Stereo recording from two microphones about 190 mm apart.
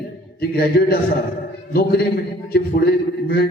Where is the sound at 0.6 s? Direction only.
55° left (ahead or behind).